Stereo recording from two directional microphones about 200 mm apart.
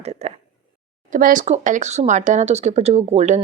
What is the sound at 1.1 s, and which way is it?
Speech, 45° right (ahead or behind).